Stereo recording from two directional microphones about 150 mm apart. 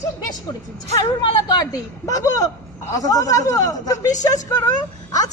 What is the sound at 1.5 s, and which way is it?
A woman's voice, 25° left (ahead or behind).